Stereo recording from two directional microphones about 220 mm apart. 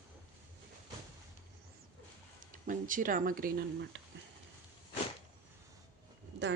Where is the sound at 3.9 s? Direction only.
55° right (ahead or behind).